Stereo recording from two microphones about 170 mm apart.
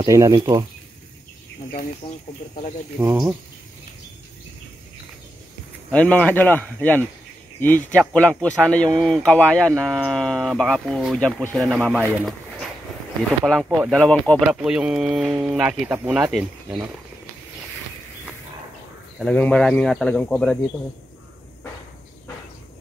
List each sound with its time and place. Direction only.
0.0 s speech: 20° right (ahead or behind)
2.0 s speech: 30° left (ahead or behind)
5.9 s speech: 5° left (ahead or behind)
12.0 s speech: 10° right (ahead or behind)
13.5 s speech: centre (ahead or behind)
19.1 s speech: 5° left (ahead or behind)